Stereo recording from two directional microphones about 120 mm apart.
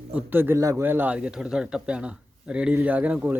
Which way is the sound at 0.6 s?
30° right (ahead or behind).